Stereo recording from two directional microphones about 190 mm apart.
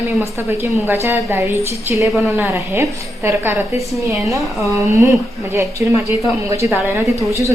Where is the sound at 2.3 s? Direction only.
15° right (ahead or behind).